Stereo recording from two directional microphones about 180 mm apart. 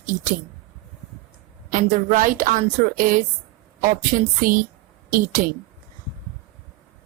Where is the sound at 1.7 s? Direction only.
45° right (ahead or behind).